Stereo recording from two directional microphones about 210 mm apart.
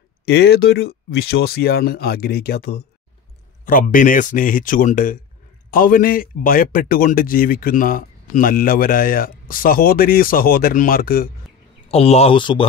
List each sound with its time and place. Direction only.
0.2 s a man's voice: 50° left (ahead or behind)
11.9 s speech: 30° left (ahead or behind)